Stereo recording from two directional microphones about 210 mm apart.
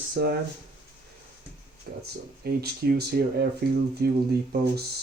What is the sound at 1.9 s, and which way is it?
Speech, 45° right (ahead or behind).